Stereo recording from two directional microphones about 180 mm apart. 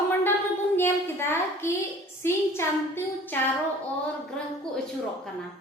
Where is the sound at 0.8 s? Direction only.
10° left (ahead or behind).